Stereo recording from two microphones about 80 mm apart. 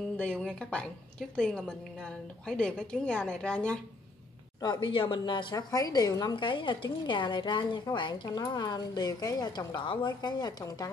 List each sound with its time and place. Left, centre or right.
0.2 s a woman's voice: centre
4.6 s a woman's voice: left
6.3 s a woman's voice: left
9.8 s a woman's voice: left